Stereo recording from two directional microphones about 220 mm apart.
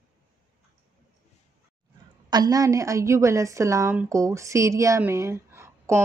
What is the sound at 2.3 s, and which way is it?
A woman's voice, 15° right (ahead or behind).